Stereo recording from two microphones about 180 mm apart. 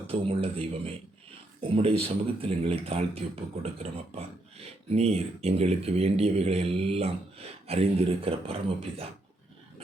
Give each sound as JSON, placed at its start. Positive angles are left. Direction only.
{"t": 0.1, "sound": "speech", "side_deg": -30}